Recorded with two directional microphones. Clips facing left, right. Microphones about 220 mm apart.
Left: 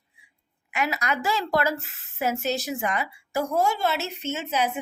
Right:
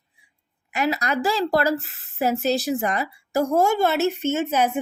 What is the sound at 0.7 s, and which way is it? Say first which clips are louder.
A woman's voice: right 4 dB; 35° right (ahead or behind).